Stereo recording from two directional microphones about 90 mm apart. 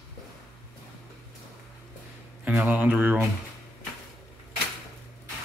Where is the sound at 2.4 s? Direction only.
15° right (ahead or behind).